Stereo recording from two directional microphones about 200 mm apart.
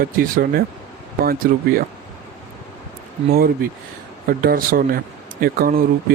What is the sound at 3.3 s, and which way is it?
Speech, 50° right (ahead or behind).